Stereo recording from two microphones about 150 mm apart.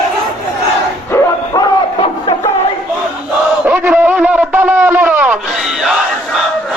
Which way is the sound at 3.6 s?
15° right (ahead or behind).